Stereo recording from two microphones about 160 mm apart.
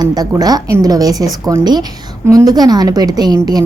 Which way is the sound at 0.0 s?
25° right (ahead or behind).